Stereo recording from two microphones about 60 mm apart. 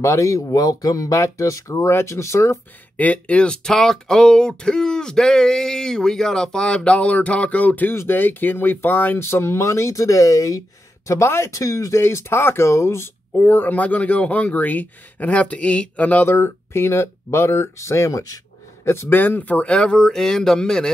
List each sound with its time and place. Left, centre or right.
0.0 s speech: left
1.1 s speech: left
3.0 s speech: left
9.2 s speech: left
11.1 s speech: left
12.0 s speech: left
13.3 s a man's voice: left
16.3 s speech: left
19.1 s speech: left; by 20.9 s centre